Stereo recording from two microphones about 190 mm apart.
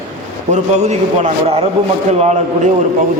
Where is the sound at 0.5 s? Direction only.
35° right (ahead or behind).